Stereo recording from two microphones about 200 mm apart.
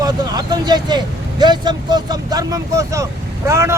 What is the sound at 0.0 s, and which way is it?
A man's voice, 20° right (ahead or behind).